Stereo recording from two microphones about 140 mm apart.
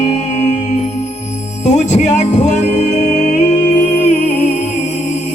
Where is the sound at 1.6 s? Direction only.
55° left (ahead or behind).